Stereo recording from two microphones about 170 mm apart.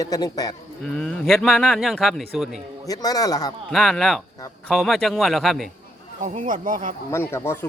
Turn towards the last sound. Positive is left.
turn(degrees=15)  # may be behind; listen again after turning